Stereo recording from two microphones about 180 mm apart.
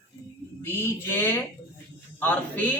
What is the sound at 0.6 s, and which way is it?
A woman's voice, 15° left (ahead or behind).